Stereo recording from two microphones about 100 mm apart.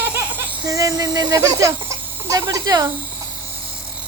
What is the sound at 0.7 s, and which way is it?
Speech, 35° right (ahead or behind).